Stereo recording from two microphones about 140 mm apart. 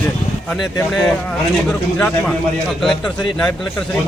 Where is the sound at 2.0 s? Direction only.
10° left (ahead or behind).